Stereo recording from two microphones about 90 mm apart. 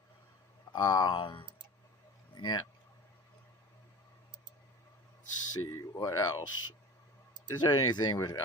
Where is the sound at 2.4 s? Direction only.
50° left (ahead or behind).